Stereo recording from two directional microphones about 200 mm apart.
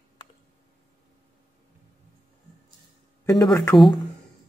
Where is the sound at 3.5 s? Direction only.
10° left (ahead or behind).